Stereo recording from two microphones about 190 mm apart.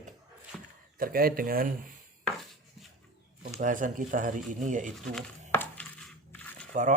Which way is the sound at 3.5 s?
40° right (ahead or behind).